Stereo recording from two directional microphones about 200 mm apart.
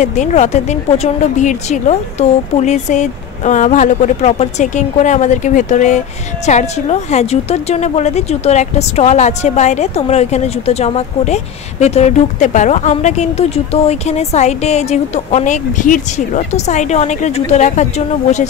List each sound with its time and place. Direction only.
0.0 s speech: 35° left (ahead or behind)